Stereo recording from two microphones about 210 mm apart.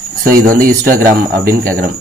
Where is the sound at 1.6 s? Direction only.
40° right (ahead or behind).